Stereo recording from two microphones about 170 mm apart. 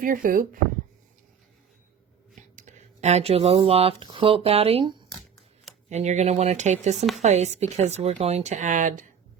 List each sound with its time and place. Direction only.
0.0 s speech: 55° right (ahead or behind)
2.6 s speech: 45° right (ahead or behind)
6.9 s a woman's voice: centre (ahead or behind)
7.2 s speech: 40° right (ahead or behind)